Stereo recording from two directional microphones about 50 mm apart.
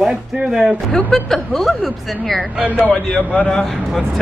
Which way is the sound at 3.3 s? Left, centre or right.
Centre.